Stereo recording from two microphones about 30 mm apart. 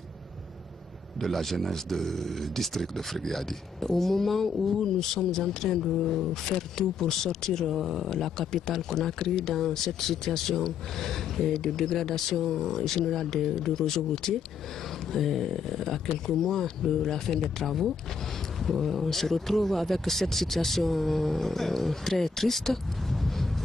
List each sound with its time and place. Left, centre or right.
1.2 s speech: centre
4.7 s speech: centre
5.8 s speech: centre
6.3 s speech: centre
7.7 s speech: centre
8.1 s speech: centre
15.1 s speech: centre
18.6 s a man's voice: centre